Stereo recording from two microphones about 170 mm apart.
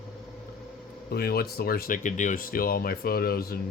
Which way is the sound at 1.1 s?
65° left (ahead or behind).